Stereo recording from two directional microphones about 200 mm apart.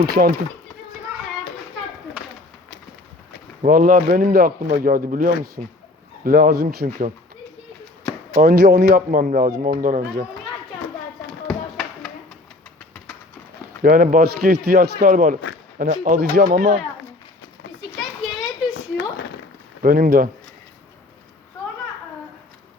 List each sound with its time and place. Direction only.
0.0 s speech: 50° right (ahead or behind)
3.6 s speech: 45° right (ahead or behind)
8.4 s speech: 50° right (ahead or behind)
11.4 s a sound: centre (ahead or behind)
13.8 s speech: 45° right (ahead or behind)
19.8 s speech: 45° right (ahead or behind)